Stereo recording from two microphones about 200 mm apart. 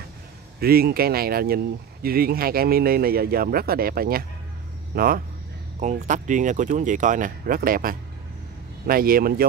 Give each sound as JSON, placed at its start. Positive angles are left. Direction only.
{"t": 0.6, "sound": "speech", "side_deg": -50}
{"t": 5.8, "sound": "speech", "side_deg": -35}